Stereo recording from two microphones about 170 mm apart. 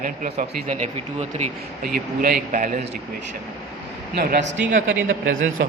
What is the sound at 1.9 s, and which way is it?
Speech, 60° right (ahead or behind).